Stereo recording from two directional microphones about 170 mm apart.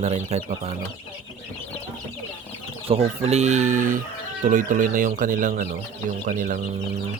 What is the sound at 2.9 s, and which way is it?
Speech, 35° right (ahead or behind).